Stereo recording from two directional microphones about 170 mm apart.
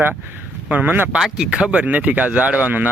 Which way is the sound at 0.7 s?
10° right (ahead or behind).